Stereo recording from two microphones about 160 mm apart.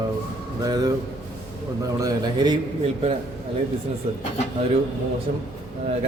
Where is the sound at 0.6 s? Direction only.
25° right (ahead or behind).